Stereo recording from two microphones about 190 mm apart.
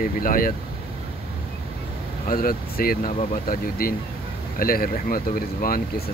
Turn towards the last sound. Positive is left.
turn(degrees=50)  # may be behind; listen again after turning